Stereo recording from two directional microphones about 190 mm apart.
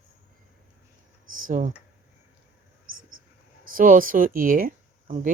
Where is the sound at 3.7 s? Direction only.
45° right (ahead or behind).